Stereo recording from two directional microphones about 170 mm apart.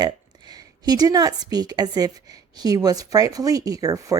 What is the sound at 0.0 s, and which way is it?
A woman's voice, 25° right (ahead or behind).